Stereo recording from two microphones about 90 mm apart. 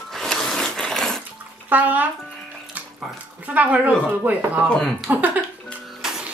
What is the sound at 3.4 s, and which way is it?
Speech, 15° right (ahead or behind).